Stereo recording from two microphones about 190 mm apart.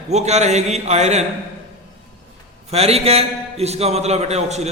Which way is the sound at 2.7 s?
35° right (ahead or behind).